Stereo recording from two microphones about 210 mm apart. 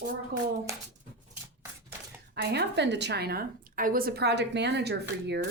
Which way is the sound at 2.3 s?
55° right (ahead or behind).